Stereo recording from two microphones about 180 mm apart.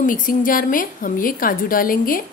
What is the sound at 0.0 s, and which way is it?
A woman's voice, 50° left (ahead or behind).